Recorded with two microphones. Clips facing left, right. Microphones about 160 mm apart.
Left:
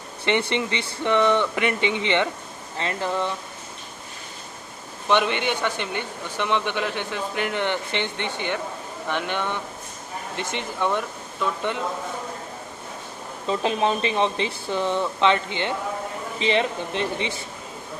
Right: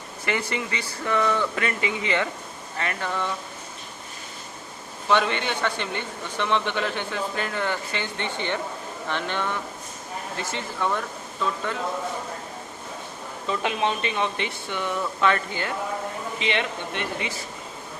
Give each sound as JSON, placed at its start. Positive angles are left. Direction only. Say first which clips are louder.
{"t": 0.3, "sound": "speech", "louder": "left 5 dB", "side_deg": 25}
{"t": 5.0, "sound": "speech", "louder": "left 1 dB", "side_deg": 20}
{"t": 13.5, "sound": "speech", "louder": "left 3 dB", "side_deg": 30}
{"t": 16.4, "sound": "speech", "louder": "left 6 dB", "side_deg": 30}